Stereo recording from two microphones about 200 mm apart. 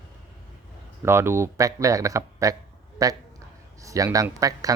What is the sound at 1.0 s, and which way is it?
Speech, 15° right (ahead or behind).